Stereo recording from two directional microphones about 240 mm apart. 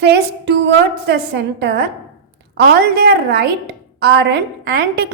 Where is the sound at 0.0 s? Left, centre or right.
Right.